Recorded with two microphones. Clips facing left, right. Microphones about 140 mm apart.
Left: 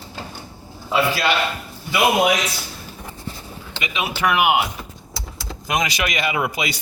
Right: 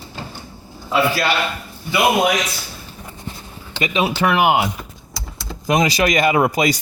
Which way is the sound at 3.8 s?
35° right (ahead or behind).